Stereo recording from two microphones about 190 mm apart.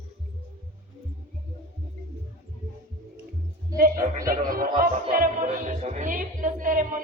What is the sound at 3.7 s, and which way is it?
Music, 45° right (ahead or behind).